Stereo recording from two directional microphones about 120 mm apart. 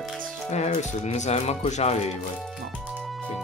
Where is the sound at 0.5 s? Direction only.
65° left (ahead or behind).